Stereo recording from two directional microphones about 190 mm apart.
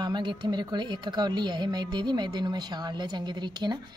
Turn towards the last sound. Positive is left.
turn(degrees=-20)  # may be behind; listen again after turning